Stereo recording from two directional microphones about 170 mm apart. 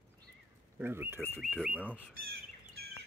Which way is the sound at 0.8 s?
15° right (ahead or behind).